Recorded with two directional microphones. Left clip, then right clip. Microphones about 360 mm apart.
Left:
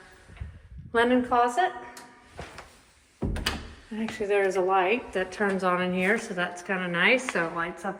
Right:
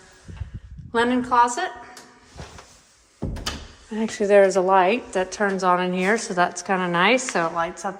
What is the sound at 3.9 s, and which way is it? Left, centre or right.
A woman's voice, centre.